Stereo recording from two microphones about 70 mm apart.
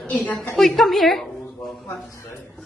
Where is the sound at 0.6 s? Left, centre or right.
Centre.